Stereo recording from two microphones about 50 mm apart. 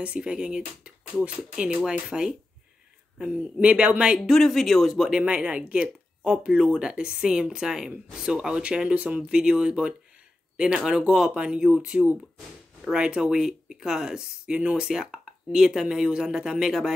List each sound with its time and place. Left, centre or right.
0.0 s speech: right
4.2 s speech: centre
5.2 s speech: right
8.9 s speech: right
9.3 s speech: centre